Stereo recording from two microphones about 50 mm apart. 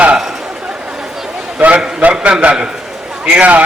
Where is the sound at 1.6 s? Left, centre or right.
Right.